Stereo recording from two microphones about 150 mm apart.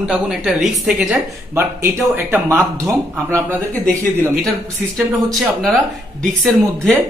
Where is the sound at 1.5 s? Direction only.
15° right (ahead or behind).